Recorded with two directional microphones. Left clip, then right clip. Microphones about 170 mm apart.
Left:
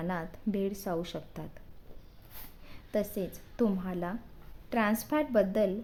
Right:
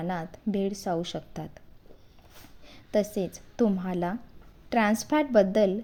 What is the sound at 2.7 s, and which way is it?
A woman's voice, 20° right (ahead or behind).